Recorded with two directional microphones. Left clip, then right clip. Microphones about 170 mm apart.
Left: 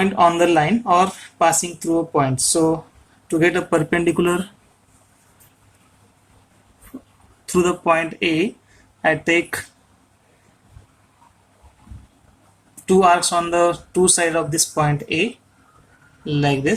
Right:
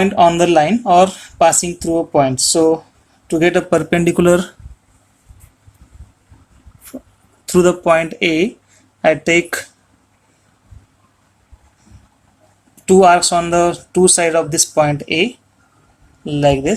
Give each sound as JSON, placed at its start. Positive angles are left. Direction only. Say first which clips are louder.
{"t": 0.0, "sound": "speech", "louder": "right 4 dB", "side_deg": -35}
{"t": 7.4, "sound": "speech", "louder": "right 5 dB", "side_deg": -40}
{"t": 12.9, "sound": "speech", "louder": "right 5 dB", "side_deg": -40}